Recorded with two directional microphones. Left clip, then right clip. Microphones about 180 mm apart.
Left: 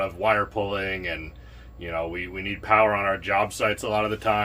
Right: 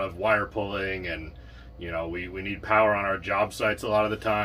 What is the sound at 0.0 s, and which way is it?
Speech, 35° left (ahead or behind).